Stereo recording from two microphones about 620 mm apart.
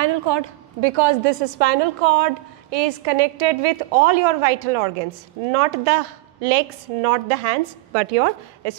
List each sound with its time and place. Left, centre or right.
0.0 s a woman's voice: right